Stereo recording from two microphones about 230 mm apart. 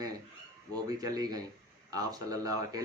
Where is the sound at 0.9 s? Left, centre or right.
Centre.